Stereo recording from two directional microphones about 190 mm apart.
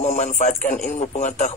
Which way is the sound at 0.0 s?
40° left (ahead or behind).